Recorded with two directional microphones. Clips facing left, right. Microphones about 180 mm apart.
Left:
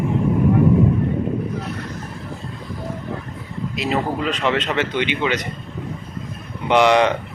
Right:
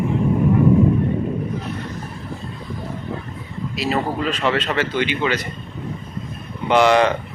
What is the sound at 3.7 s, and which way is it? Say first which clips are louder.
A man's voice: even; 20° left (ahead or behind).